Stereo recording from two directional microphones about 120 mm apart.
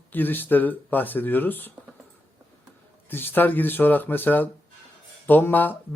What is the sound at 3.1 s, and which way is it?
A man's voice, 15° left (ahead or behind).